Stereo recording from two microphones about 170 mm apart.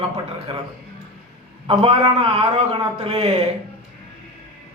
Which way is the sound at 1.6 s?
35° right (ahead or behind).